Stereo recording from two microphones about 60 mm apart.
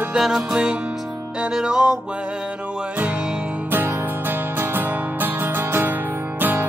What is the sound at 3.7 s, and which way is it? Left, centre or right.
Music, right.